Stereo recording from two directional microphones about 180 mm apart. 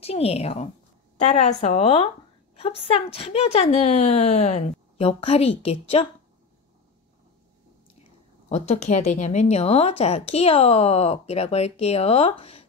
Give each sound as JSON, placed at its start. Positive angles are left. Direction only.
{"t": 0.0, "sound": "a woman's voice", "side_deg": 35}
{"t": 8.5, "sound": "a woman's voice", "side_deg": 40}